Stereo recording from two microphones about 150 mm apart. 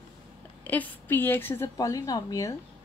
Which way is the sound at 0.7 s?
10° left (ahead or behind).